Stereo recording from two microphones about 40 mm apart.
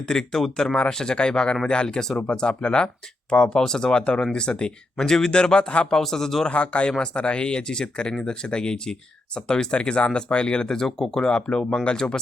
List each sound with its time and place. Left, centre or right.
0.1 s speech: centre
6.0 s speech: centre
6.5 s speech: left; by 11.3 s centre
11.3 s speech: left